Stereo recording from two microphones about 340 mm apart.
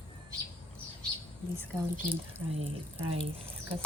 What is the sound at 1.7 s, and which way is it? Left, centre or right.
Speech, centre.